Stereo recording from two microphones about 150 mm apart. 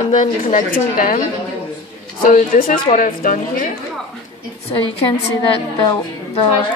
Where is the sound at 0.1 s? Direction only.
60° left (ahead or behind).